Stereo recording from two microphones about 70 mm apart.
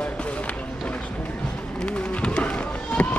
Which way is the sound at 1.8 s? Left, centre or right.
Centre.